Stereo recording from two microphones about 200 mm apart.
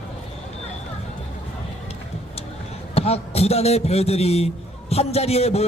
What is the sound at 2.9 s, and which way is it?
A man's voice, 30° left (ahead or behind).